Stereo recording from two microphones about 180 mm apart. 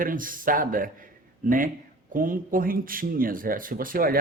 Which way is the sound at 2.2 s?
50° right (ahead or behind).